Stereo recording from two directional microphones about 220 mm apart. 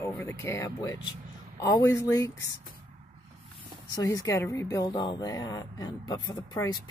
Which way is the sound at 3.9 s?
15° left (ahead or behind).